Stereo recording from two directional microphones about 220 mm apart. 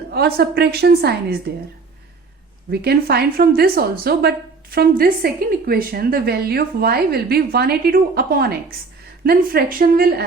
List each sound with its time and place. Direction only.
0.1 s a woman's voice: 45° right (ahead or behind)
2.6 s a woman's voice: 45° right (ahead or behind)